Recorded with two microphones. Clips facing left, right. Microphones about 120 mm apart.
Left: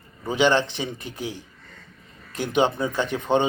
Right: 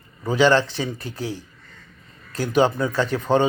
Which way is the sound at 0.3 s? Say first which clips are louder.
Right 3 dB; 20° left (ahead or behind).